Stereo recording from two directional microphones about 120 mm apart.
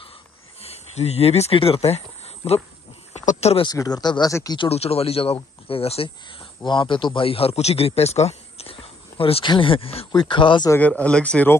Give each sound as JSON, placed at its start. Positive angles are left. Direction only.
{"t": 0.6, "sound": "speech", "side_deg": 60}
{"t": 3.1, "sound": "a sound", "side_deg": 60}
{"t": 3.6, "sound": "speech", "side_deg": 35}
{"t": 4.3, "sound": "speech", "side_deg": 25}
{"t": 4.6, "sound": "speech", "side_deg": 55}
{"t": 6.6, "sound": "a man's voice", "side_deg": 40}
{"t": 10.8, "sound": "speech", "side_deg": 10}